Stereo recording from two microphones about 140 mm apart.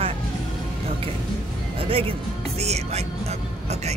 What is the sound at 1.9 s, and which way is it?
Speech, 40° right (ahead or behind).